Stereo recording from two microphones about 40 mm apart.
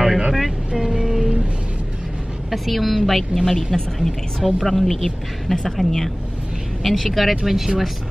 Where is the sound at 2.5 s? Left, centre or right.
Centre.